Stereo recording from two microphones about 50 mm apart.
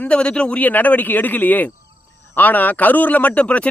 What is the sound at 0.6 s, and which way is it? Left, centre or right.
Speech, left.